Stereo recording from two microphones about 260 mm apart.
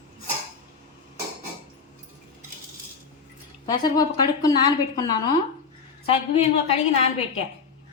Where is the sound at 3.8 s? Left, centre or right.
Centre.